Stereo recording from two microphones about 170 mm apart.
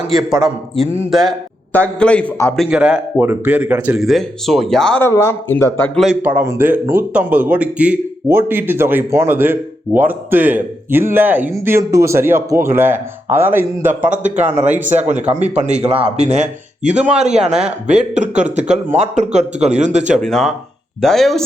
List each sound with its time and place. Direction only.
0.1 s a man's voice: centre (ahead or behind)
2.6 s speech: 5° right (ahead or behind)
5.0 s a man's voice: 15° left (ahead or behind)
6.0 s speech: 5° right (ahead or behind)
14.8 s speech: 45° right (ahead or behind)
17.4 s speech: 5° right (ahead or behind)
18.2 s speech: 45° right (ahead or behind)
20.1 s speech: centre (ahead or behind)